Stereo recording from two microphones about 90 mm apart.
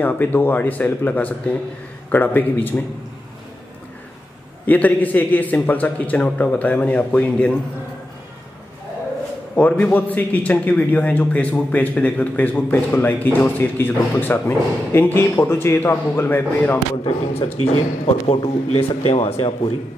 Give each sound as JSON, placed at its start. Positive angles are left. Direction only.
{"t": 0.0, "sound": "a man's voice", "side_deg": 20}
{"t": 4.6, "sound": "a man's voice", "side_deg": 20}
{"t": 9.6, "sound": "a man's voice", "side_deg": 15}
{"t": 16.9, "sound": "speech", "side_deg": 75}
{"t": 18.3, "sound": "speech", "side_deg": 90}